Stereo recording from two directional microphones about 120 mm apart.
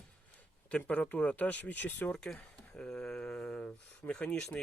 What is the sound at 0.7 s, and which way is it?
Speech, 10° left (ahead or behind).